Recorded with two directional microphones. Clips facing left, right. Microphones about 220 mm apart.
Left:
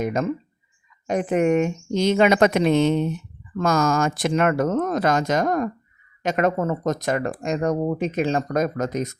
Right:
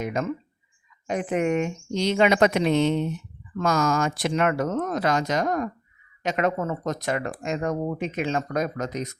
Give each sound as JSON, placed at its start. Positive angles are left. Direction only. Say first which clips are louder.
{"t": 0.0, "sound": "speech", "louder": "left 4 dB", "side_deg": 40}